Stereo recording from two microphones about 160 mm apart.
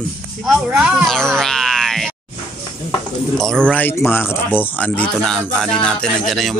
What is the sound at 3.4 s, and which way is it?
A woman's voice, 5° left (ahead or behind).